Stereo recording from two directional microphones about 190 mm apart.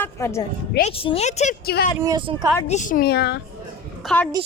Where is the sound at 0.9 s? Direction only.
30° left (ahead or behind).